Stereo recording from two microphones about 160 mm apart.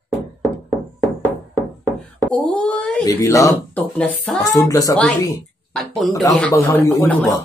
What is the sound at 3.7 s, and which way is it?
Speech, 10° left (ahead or behind).